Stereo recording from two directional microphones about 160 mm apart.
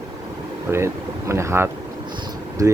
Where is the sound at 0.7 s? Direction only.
15° right (ahead or behind).